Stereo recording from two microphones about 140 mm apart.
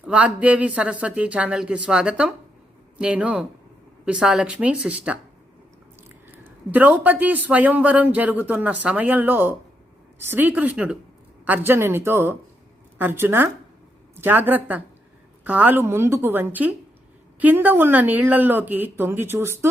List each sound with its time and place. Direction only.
0.0 s speech: 10° right (ahead or behind)
6.2 s speech: 15° right (ahead or behind)